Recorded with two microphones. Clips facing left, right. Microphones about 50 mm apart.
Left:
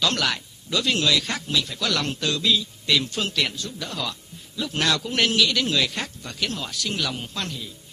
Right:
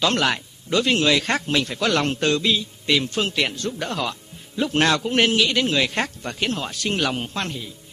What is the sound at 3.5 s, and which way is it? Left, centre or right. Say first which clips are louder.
Speech: right 6 dB; right.